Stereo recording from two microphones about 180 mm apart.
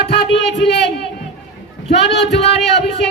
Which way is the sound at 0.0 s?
65° left (ahead or behind).